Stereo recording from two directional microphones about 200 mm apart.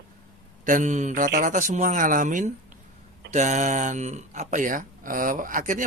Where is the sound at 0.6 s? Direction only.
40° right (ahead or behind).